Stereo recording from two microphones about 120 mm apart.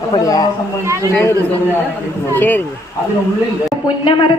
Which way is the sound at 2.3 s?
15° left (ahead or behind).